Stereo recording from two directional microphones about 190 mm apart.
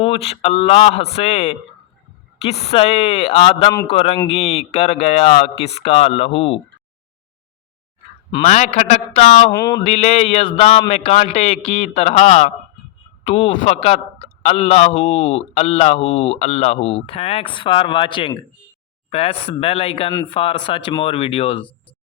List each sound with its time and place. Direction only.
0.0 s a man's voice: 30° left (ahead or behind)
8.4 s a man's voice: 35° left (ahead or behind)
9.5 s mantra: 20° left (ahead or behind)
9.8 s a man's voice: 35° left (ahead or behind)